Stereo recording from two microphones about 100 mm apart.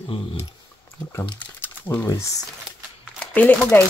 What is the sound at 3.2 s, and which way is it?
Speech, 15° left (ahead or behind).